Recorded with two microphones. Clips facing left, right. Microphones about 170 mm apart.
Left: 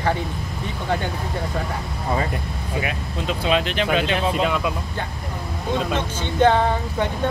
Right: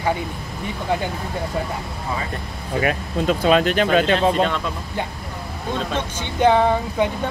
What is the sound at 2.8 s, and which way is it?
Speech, 45° right (ahead or behind).